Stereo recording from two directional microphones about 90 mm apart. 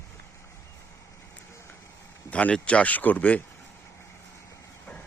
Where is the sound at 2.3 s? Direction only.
15° left (ahead or behind).